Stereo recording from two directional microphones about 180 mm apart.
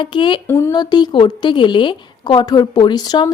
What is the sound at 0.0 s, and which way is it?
Speech, 25° left (ahead or behind).